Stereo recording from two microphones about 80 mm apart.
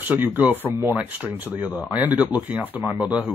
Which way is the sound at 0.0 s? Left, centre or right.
Right.